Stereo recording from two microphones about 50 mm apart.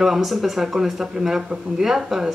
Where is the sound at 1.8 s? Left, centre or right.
Centre.